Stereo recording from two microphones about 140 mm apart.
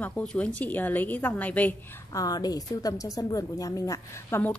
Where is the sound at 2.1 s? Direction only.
25° left (ahead or behind).